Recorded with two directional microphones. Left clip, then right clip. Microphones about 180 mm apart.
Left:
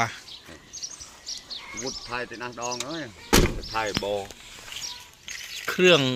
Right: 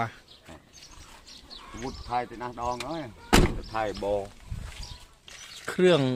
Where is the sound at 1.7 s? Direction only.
40° right (ahead or behind).